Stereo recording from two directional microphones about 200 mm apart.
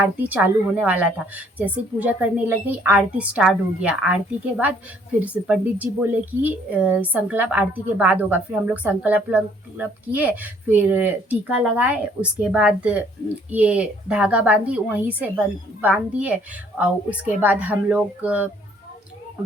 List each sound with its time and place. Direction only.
0.0 s speech: 10° right (ahead or behind)